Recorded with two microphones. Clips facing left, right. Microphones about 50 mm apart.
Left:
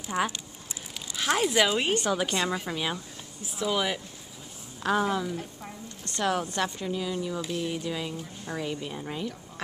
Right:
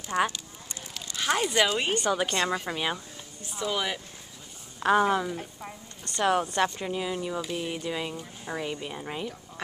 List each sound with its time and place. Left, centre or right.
0.1 s speech: centre
3.4 s speech: centre
4.8 s a woman's voice: centre
6.5 s a woman's voice: right